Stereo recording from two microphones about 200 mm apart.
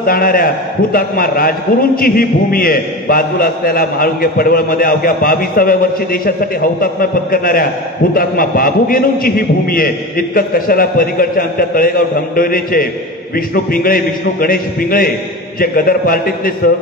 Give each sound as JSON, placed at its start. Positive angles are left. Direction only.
{"t": 0.0, "sound": "a man's voice", "side_deg": 45}